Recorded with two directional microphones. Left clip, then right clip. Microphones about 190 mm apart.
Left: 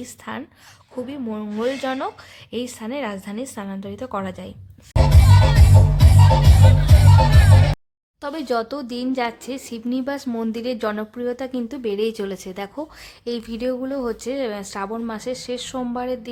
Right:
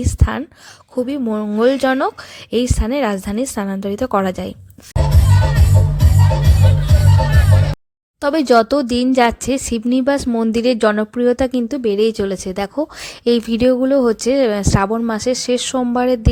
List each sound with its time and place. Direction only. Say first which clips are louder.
0.0 s speech: right 9 dB; 30° right (ahead or behind)
4.9 s music: left 1 dB; 10° left (ahead or behind)
8.2 s speech: right 11 dB; 35° right (ahead or behind)
10.2 s speech: right 8 dB; 15° right (ahead or behind)
10.5 s speech: right 12 dB; 30° right (ahead or behind)